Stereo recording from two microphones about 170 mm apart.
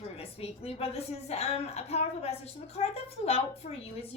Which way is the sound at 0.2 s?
35° left (ahead or behind).